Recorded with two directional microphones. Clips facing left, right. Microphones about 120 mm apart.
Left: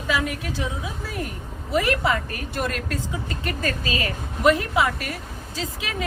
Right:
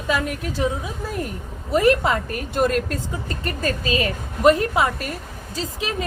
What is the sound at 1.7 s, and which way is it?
A woman's voice, 40° right (ahead or behind).